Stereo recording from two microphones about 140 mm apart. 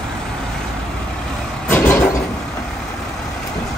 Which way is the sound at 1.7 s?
10° left (ahead or behind).